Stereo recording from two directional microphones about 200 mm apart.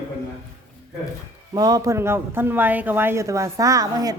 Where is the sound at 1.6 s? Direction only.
20° right (ahead or behind).